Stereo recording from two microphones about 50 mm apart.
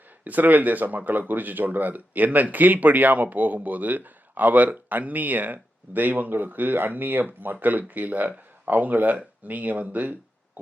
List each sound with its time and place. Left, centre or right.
0.3 s speech: right